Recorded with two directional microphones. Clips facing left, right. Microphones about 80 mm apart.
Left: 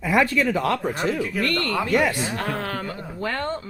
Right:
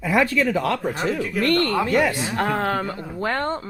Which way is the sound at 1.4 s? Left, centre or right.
Right.